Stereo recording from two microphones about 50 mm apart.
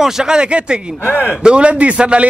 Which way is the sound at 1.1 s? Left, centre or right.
Left.